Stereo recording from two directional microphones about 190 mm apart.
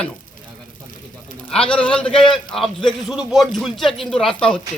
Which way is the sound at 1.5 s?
5° left (ahead or behind).